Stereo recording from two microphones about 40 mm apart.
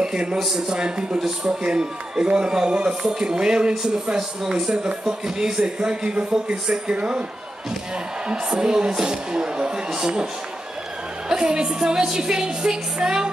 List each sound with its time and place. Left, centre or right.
0.0 s a man's voice: right
8.5 s speech: right
11.2 s speech: right